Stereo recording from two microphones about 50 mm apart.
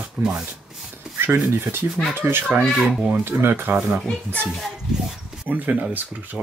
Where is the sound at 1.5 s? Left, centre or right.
Right.